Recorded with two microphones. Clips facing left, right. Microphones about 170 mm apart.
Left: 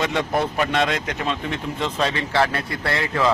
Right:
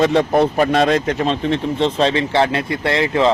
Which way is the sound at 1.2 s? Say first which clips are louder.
Right 7 dB; 30° right (ahead or behind).